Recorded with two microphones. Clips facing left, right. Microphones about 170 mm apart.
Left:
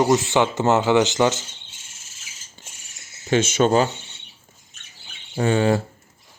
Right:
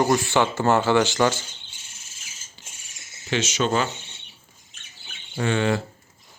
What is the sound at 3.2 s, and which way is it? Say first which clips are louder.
Speech: left 6 dB; 50° left (ahead or behind).